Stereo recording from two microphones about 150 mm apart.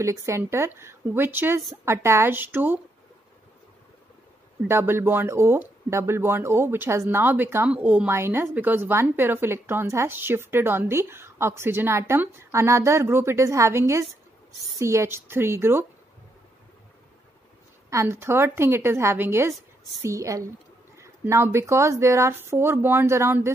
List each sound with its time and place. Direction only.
0.0 s speech: 20° right (ahead or behind)
4.6 s speech: 15° right (ahead or behind)
17.8 s a woman's voice: 20° right (ahead or behind)